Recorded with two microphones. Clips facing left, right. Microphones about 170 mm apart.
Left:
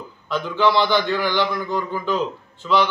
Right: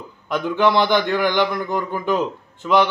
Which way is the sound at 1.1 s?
15° right (ahead or behind).